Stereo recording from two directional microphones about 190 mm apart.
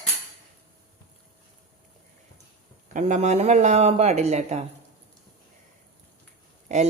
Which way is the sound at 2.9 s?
40° right (ahead or behind).